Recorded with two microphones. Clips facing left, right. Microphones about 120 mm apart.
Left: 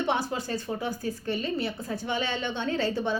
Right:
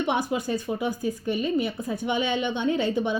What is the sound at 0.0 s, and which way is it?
A woman's voice, 15° right (ahead or behind).